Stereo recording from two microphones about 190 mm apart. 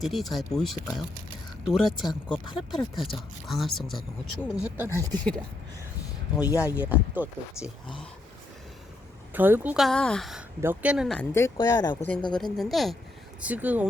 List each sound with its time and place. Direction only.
0.0 s speech: centre (ahead or behind)
4.5 s speech: 15° right (ahead or behind)
6.4 s speech: 15° left (ahead or behind)
6.7 s speech: 10° right (ahead or behind)
9.3 s speech: 10° right (ahead or behind)
11.3 s speech: 15° left (ahead or behind); by 13.8 s 10° right (ahead or behind)